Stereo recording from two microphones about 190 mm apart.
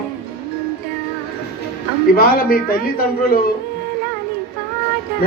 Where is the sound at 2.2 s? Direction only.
50° left (ahead or behind).